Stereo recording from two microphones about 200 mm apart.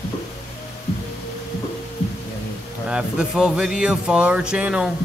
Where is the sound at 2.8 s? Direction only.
5° right (ahead or behind).